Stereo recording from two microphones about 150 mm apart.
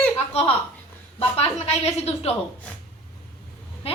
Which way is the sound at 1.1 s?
45° left (ahead or behind).